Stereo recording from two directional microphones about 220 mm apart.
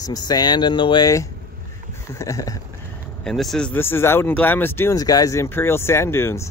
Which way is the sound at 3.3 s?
Centre (ahead or behind).